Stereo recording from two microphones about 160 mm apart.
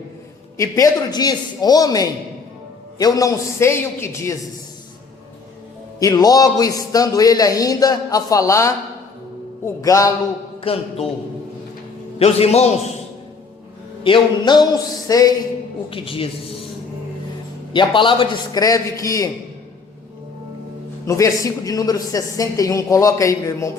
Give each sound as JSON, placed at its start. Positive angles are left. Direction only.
{"t": 0.5, "sound": "a man's voice", "side_deg": 20}
{"t": 6.0, "sound": "a man's voice", "side_deg": 25}
{"t": 9.8, "sound": "a man's voice", "side_deg": 20}
{"t": 10.6, "sound": "a man's voice", "side_deg": 35}
{"t": 12.2, "sound": "a man's voice", "side_deg": 40}
{"t": 14.0, "sound": "a man's voice", "side_deg": 30}
{"t": 15.9, "sound": "a man's voice", "side_deg": 35}
{"t": 17.7, "sound": "a man's voice", "side_deg": 30}
{"t": 21.1, "sound": "a man's voice", "side_deg": 20}